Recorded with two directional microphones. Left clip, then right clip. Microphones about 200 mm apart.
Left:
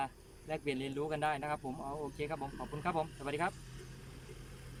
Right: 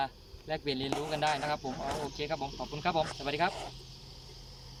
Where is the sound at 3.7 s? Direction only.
55° left (ahead or behind).